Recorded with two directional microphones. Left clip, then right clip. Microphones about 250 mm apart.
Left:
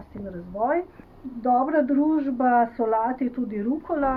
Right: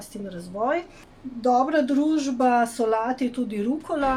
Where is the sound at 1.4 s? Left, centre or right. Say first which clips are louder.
Right 1 dB; right.